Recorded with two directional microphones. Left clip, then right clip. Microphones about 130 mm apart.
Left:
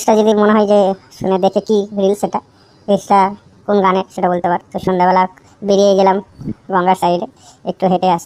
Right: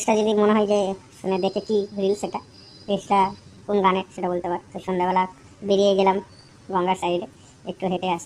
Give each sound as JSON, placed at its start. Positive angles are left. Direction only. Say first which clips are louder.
{"t": 0.0, "sound": "a woman's voice", "louder": "left 8 dB", "side_deg": 35}